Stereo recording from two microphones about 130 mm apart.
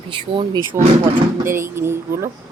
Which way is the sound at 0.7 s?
20° right (ahead or behind).